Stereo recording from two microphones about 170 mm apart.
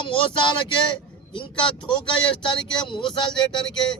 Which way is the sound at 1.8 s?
30° left (ahead or behind).